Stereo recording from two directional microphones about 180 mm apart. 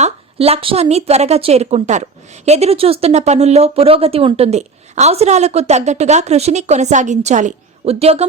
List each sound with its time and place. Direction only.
0.0 s a woman's voice: 35° right (ahead or behind)